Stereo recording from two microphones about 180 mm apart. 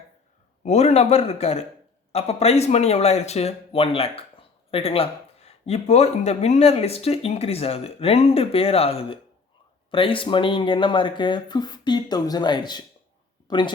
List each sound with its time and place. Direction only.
0.6 s speech: 40° left (ahead or behind)